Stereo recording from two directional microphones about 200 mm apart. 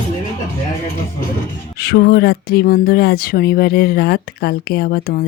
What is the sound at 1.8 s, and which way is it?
Speech, 50° left (ahead or behind).